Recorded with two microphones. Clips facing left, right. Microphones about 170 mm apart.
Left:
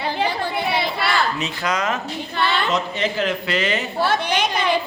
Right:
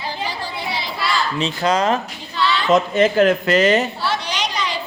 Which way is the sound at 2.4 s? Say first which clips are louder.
Right 1 dB; 55° left (ahead or behind).